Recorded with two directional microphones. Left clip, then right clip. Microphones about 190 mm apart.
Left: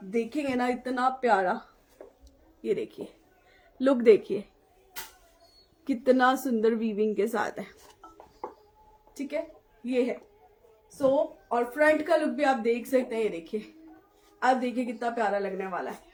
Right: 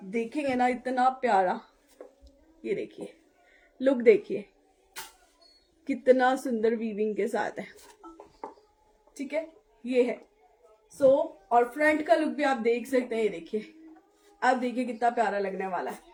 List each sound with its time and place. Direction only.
0.1 s speech: 15° left (ahead or behind)
2.0 s a sound: 40° right (ahead or behind)
2.6 s speech: 20° left (ahead or behind)
5.8 s speech: 20° left (ahead or behind)
9.1 s speech: 20° left (ahead or behind)
11.4 s speech: 20° left (ahead or behind)